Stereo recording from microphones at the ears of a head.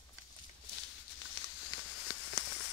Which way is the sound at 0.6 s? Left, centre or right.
Left.